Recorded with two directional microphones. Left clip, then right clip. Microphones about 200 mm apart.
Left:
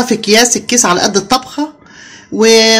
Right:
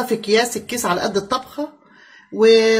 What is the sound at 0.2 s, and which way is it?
Speech, 55° left (ahead or behind).